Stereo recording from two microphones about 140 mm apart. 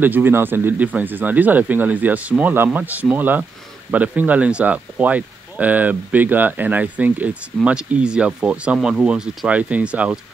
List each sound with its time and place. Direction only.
0.0 s speech: 15° right (ahead or behind)